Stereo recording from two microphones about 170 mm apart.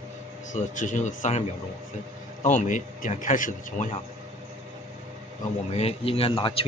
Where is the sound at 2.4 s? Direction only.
50° left (ahead or behind).